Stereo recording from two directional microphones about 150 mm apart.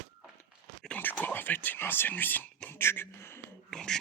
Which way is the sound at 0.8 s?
10° left (ahead or behind).